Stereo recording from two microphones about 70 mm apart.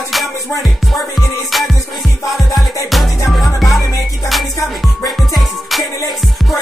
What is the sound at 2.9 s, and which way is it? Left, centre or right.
Music, centre.